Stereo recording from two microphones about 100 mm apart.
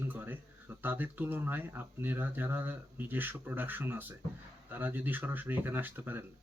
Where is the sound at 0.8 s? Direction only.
20° right (ahead or behind).